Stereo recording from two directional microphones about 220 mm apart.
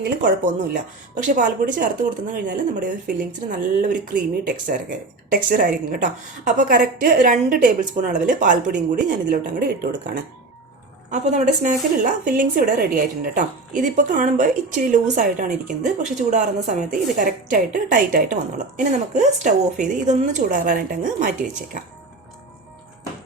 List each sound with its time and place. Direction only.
0.2 s speech: 35° right (ahead or behind)